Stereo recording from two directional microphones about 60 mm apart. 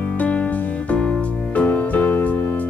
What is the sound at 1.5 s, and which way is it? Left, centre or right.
Music, left.